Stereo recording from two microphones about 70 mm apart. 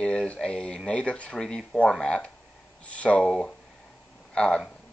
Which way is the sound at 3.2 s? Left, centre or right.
Centre.